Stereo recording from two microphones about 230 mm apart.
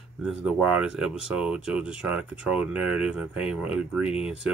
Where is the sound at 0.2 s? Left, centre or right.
Centre.